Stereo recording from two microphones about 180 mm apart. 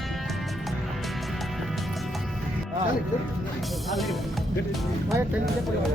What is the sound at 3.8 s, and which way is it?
Speech, centre (ahead or behind).